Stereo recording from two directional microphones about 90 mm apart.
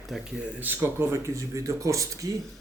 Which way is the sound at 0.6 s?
20° right (ahead or behind).